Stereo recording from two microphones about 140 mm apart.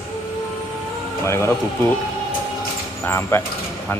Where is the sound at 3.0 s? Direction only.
15° left (ahead or behind).